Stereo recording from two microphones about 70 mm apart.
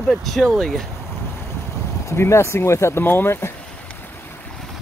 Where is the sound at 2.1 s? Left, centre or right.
Left.